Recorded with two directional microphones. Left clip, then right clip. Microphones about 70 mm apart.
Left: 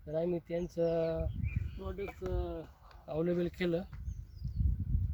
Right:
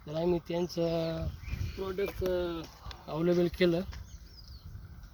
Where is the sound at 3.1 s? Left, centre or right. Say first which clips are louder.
Right 5 dB; left.